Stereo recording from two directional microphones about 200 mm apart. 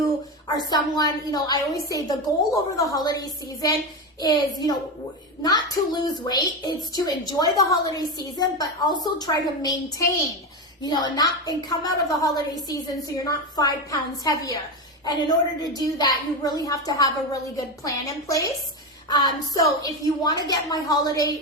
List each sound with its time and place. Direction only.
0.4 s a woman's voice: 20° left (ahead or behind)